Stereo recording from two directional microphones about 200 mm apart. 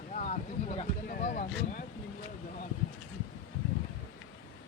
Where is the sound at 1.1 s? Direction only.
45° left (ahead or behind).